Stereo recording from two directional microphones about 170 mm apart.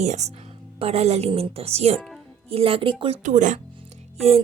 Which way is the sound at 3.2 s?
45° right (ahead or behind).